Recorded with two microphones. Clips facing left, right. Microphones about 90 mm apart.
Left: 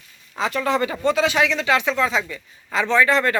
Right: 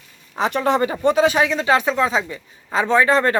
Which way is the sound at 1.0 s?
45° right (ahead or behind).